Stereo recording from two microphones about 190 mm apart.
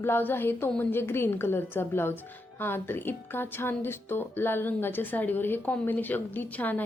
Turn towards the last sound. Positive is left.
turn(degrees=10)  # may be behind; listen again after turning